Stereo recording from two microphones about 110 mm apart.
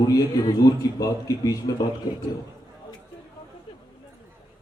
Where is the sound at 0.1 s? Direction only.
35° left (ahead or behind).